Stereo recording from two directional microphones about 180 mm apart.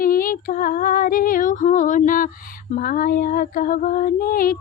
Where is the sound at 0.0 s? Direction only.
50° left (ahead or behind).